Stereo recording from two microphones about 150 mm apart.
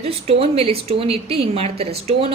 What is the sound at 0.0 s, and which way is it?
A woman's voice, 40° right (ahead or behind).